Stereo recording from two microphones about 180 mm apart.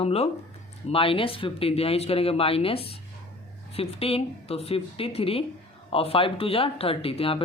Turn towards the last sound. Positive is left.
turn(degrees=30)  # may be behind; listen again after turning